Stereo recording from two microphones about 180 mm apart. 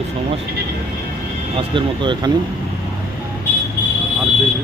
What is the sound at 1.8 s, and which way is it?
Speech, 25° right (ahead or behind).